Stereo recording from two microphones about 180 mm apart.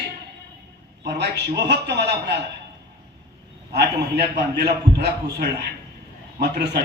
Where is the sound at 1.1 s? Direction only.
70° right (ahead or behind).